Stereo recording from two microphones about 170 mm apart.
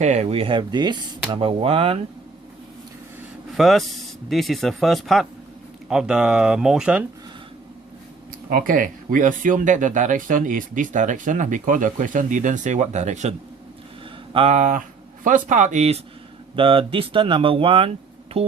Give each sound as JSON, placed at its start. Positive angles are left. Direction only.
{"t": 0.0, "sound": "speech", "side_deg": -40}
{"t": 3.6, "sound": "speech", "side_deg": 0}
{"t": 8.4, "sound": "speech", "side_deg": -55}
{"t": 14.3, "sound": "speech", "side_deg": -40}
{"t": 16.6, "sound": "speech", "side_deg": -30}